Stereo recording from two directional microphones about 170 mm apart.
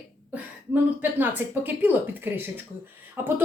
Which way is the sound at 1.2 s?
10° right (ahead or behind).